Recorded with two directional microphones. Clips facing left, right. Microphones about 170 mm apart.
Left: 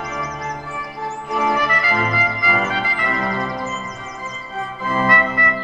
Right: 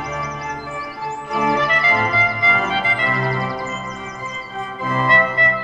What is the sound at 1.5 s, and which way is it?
Music, 25° right (ahead or behind).